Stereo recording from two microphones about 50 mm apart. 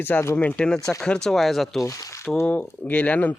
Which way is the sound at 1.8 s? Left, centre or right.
Left.